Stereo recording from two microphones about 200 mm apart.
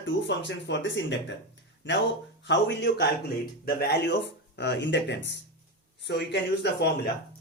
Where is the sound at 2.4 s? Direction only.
60° left (ahead or behind).